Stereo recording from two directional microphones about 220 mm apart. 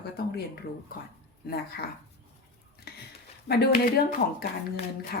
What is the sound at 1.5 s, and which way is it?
Speech, 45° left (ahead or behind).